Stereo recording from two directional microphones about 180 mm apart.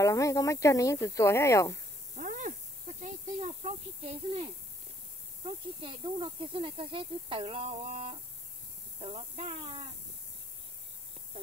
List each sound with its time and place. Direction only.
0.0 s speech: 15° left (ahead or behind)
2.1 s a sound: 45° right (ahead or behind)
3.0 s snake: 40° right (ahead or behind)
5.4 s speech: 30° right (ahead or behind)